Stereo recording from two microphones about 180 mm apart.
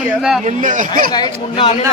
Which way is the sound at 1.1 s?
25° left (ahead or behind).